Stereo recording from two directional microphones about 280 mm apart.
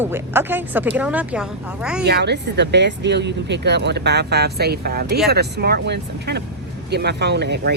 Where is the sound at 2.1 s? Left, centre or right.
Right.